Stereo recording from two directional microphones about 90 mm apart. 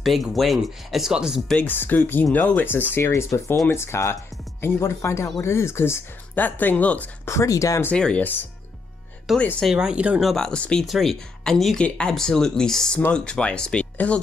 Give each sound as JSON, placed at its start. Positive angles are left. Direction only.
{"t": 0.0, "sound": "speech", "side_deg": 0}
{"t": 1.6, "sound": "speech", "side_deg": 20}
{"t": 3.1, "sound": "speech", "side_deg": 35}
{"t": 7.2, "sound": "speech", "side_deg": 35}
{"t": 8.0, "sound": "speech", "side_deg": 15}
{"t": 9.3, "sound": "speech", "side_deg": -5}
{"t": 10.2, "sound": "speech", "side_deg": 5}